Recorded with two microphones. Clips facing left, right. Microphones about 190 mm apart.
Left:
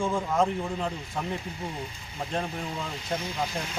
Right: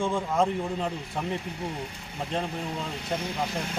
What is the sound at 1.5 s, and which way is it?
Speech, 70° right (ahead or behind).